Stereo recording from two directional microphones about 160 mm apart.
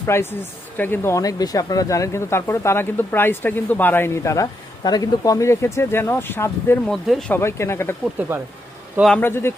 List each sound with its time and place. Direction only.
0.0 s speech: 15° left (ahead or behind)
6.9 s speech: centre (ahead or behind)
7.3 s speech: 15° left (ahead or behind)
8.2 s speech: 10° right (ahead or behind)
9.0 s speech: centre (ahead or behind)
9.2 s speech: 15° left (ahead or behind)